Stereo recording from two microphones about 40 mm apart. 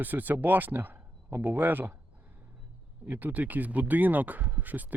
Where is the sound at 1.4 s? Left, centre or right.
Right.